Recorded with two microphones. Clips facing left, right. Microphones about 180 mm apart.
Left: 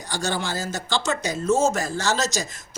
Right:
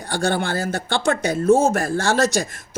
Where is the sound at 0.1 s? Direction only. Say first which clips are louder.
Right 5 dB; 55° right (ahead or behind).